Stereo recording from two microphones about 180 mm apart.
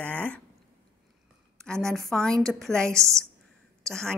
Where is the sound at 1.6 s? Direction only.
5° left (ahead or behind).